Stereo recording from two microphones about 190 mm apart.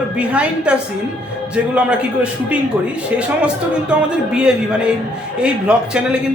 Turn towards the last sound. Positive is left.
turn(degrees=-5)  # may be behind; listen again after turning